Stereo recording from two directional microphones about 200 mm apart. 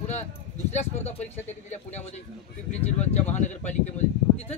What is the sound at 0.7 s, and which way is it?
A man's voice, 35° left (ahead or behind).